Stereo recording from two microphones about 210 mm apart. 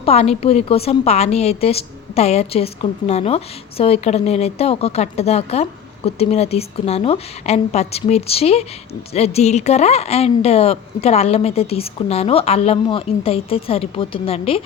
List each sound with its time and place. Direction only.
0.0 s a woman's voice: 30° left (ahead or behind)